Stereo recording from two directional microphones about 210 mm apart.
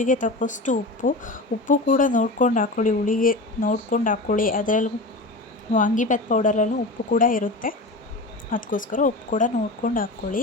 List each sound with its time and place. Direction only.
0.0 s a woman's voice: 40° left (ahead or behind)